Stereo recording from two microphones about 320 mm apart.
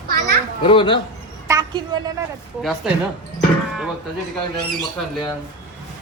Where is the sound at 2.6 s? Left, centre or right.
Centre.